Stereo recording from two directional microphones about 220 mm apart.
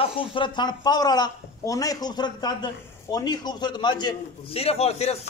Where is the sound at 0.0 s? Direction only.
25° left (ahead or behind).